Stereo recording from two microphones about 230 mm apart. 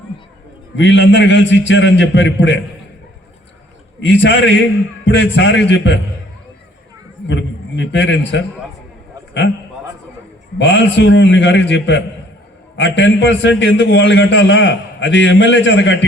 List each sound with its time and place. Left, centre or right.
0.8 s a man's voice: left
4.0 s a man's voice: left
7.3 s a man's voice: left
10.6 s a man's voice: left